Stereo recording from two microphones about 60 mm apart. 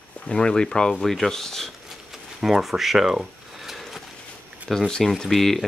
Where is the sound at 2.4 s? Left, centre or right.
Centre.